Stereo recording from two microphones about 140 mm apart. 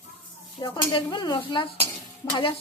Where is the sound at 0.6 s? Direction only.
30° left (ahead or behind).